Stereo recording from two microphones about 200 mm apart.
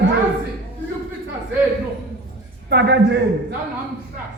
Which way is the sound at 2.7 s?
60° right (ahead or behind).